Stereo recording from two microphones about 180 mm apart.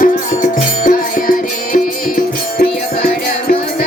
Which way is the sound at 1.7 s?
50° left (ahead or behind).